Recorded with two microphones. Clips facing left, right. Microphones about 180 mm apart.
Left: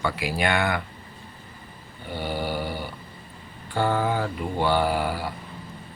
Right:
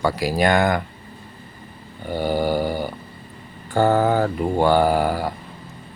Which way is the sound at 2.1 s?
45° right (ahead or behind).